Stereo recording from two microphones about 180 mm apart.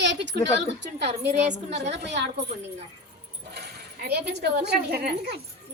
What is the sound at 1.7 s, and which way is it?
Speech, 70° right (ahead or behind).